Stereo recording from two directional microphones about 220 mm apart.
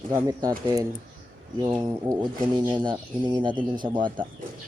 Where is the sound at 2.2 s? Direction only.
20° right (ahead or behind).